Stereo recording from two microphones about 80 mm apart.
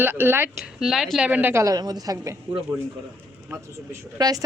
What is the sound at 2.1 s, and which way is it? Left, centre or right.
Speech, right.